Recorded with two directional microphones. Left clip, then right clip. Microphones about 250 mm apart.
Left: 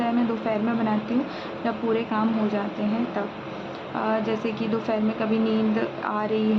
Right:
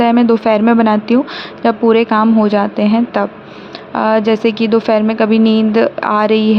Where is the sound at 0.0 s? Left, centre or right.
Right.